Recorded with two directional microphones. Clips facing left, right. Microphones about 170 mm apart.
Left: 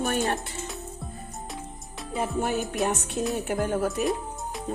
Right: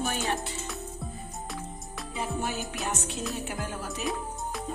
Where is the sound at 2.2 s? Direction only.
55° left (ahead or behind).